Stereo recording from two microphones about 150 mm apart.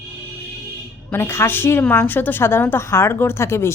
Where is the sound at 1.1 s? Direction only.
15° left (ahead or behind).